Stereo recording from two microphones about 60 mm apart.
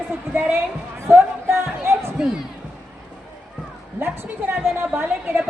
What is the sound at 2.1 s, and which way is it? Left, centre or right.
Speech, centre.